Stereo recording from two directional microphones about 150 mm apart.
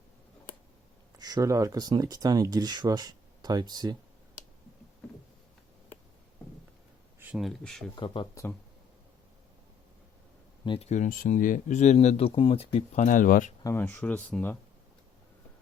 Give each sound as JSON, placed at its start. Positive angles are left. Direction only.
{"t": 1.2, "sound": "speech", "side_deg": -25}
{"t": 7.2, "sound": "a sound", "side_deg": -10}
{"t": 7.4, "sound": "speech", "side_deg": 0}
{"t": 7.9, "sound": "speech", "side_deg": 30}
{"t": 10.7, "sound": "speech", "side_deg": 45}
{"t": 13.1, "sound": "speech", "side_deg": 65}
{"t": 13.7, "sound": "speech", "side_deg": 15}